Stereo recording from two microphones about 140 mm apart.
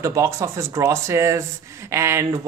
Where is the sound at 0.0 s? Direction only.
20° right (ahead or behind).